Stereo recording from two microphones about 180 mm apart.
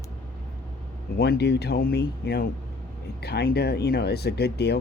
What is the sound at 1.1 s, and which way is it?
Speech, 60° left (ahead or behind).